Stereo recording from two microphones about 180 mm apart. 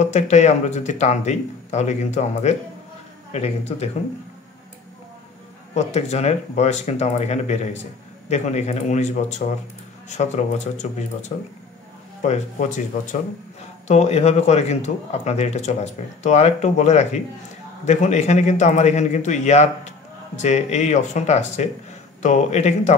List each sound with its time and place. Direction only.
0.0 s speech: 40° left (ahead or behind)
5.8 s speech: 35° left (ahead or behind)